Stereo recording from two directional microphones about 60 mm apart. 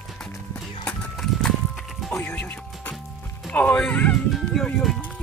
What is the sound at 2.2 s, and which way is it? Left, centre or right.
Music, left.